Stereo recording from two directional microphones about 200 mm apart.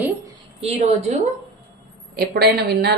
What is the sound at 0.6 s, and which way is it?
Speech, 30° right (ahead or behind).